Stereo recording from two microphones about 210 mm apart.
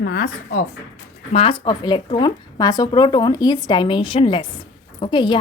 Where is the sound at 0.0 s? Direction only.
45° left (ahead or behind).